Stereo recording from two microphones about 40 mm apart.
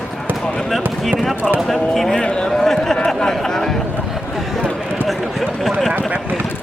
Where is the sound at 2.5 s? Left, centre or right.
Centre.